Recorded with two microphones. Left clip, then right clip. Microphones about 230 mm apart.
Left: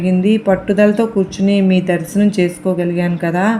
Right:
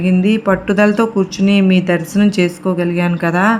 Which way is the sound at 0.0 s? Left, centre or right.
Right.